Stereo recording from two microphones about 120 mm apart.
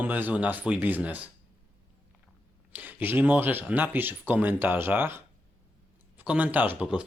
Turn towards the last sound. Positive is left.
turn(degrees=-10)  # may be behind; listen again after turning